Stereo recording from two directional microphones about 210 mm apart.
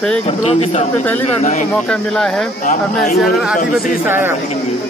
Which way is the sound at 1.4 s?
35° left (ahead or behind).